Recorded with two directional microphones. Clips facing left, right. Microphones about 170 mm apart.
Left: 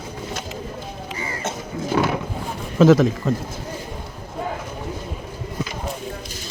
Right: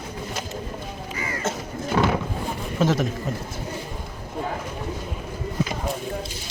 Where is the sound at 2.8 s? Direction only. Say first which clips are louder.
Left 9 dB; 90° left.